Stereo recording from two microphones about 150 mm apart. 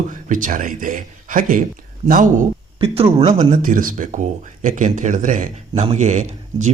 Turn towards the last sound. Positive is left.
turn(degrees=-55)  # may be behind; listen again after turning